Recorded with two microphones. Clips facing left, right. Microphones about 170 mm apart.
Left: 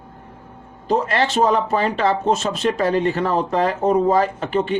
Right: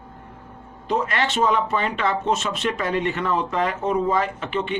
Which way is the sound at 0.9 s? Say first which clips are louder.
Left 4 dB; 35° left (ahead or behind).